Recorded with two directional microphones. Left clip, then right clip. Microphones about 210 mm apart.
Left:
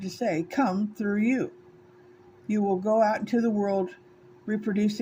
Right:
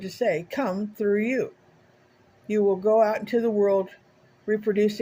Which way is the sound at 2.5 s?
20° right (ahead or behind).